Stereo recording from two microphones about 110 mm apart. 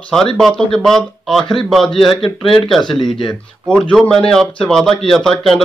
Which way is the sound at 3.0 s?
40° left (ahead or behind).